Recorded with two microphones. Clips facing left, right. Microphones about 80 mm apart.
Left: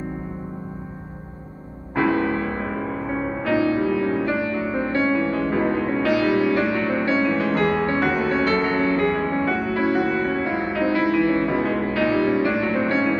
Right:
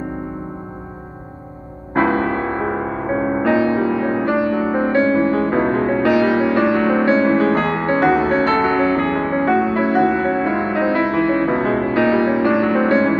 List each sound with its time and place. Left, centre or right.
2.0 s music: right
4.4 s music: right